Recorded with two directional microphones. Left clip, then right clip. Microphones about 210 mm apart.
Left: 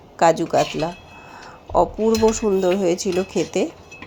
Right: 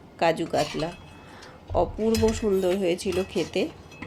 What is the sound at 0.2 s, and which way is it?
Speech, 20° left (ahead or behind).